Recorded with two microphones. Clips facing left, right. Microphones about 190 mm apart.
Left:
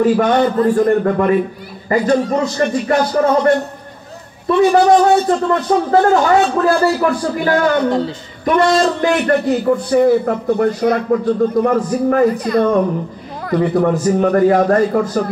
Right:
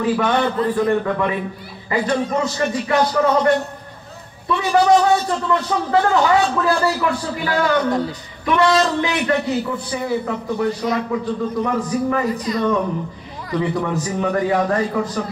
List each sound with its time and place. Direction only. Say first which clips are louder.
0.0 s a man's voice: left 6 dB; 45° left (ahead or behind)